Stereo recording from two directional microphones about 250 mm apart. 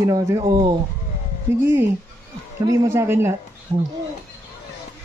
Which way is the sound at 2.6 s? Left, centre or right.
Centre.